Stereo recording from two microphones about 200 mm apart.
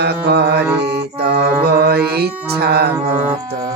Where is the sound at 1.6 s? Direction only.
50° right (ahead or behind).